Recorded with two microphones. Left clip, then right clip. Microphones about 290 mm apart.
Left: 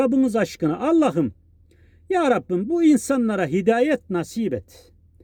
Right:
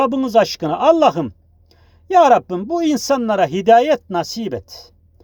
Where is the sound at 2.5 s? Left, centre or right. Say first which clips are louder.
Even; right.